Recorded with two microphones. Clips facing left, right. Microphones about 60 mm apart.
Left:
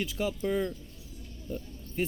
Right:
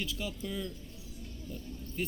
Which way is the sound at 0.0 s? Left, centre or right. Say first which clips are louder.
Left 7 dB; left.